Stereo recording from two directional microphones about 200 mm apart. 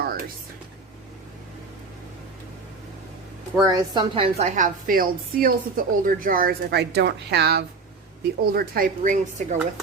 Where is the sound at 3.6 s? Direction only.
20° right (ahead or behind); by 9.5 s 40° right (ahead or behind).